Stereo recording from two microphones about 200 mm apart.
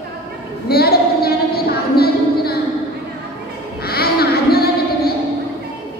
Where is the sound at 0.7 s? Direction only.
50° left (ahead or behind).